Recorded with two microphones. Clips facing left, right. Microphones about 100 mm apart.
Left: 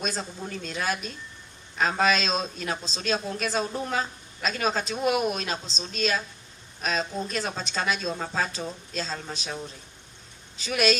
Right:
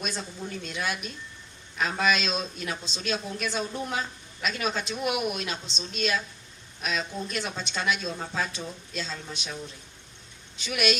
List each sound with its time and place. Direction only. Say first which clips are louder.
0.0 s speech: left 2 dB; 40° left (ahead or behind)